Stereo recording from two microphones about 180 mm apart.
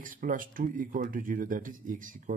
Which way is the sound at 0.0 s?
50° right (ahead or behind).